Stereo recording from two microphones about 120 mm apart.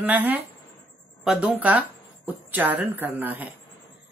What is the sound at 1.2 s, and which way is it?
Speech, 5° right (ahead or behind).